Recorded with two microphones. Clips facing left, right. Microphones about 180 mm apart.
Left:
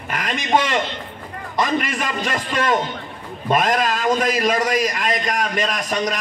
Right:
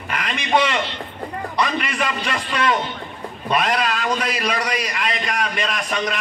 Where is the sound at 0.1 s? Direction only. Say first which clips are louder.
Left 1 dB; 45° left (ahead or behind).